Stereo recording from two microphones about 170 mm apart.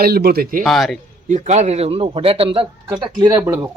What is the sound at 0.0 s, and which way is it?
Speech, 65° right (ahead or behind).